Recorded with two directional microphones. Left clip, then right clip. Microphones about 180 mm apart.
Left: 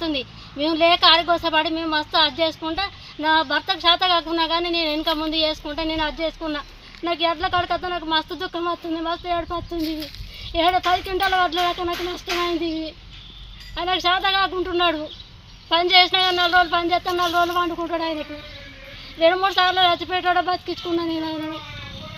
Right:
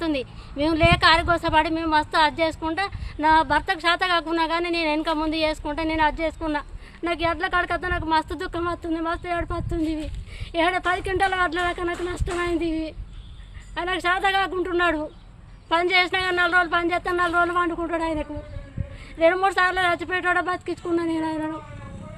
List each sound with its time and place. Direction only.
0.0 s a woman's voice: 25° right (ahead or behind)
17.2 s speech: 15° right (ahead or behind)
17.4 s a woman's voice: 25° right (ahead or behind)